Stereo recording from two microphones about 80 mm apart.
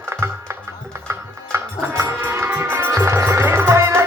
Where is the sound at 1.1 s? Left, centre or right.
Right.